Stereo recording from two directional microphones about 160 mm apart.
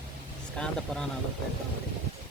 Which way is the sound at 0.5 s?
5° left (ahead or behind).